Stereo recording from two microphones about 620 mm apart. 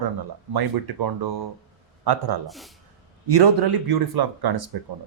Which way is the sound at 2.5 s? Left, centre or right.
Centre.